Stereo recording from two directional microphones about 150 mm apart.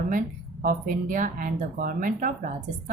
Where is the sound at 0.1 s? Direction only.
65° right (ahead or behind).